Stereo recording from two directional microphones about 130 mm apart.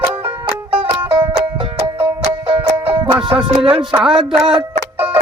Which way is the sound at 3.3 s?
40° right (ahead or behind).